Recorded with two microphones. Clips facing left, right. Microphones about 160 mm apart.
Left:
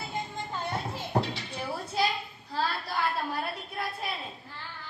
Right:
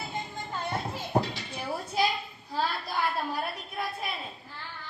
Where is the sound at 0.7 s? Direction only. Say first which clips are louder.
Right 2 dB; 10° right (ahead or behind).